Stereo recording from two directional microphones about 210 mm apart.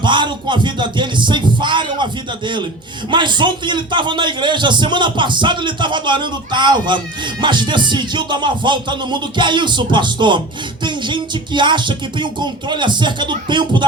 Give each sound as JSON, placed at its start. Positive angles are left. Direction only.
{"t": 0.0, "sound": "a man's voice", "side_deg": -20}
{"t": 3.1, "sound": "a man's voice", "side_deg": -20}